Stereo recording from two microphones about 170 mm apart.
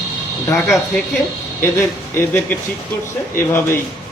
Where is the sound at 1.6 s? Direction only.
15° left (ahead or behind).